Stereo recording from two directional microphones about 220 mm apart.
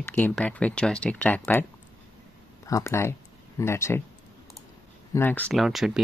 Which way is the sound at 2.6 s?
10° left (ahead or behind).